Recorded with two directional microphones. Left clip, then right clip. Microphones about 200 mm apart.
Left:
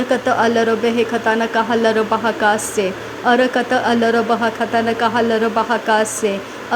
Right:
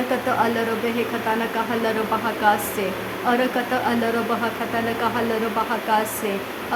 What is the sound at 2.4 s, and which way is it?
A woman's voice, 25° left (ahead or behind).